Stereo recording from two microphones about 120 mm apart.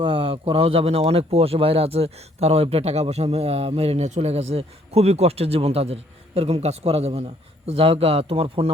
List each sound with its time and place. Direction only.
0.0 s speech: 45° right (ahead or behind)